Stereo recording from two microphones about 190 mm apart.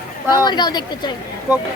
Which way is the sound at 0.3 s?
20° left (ahead or behind).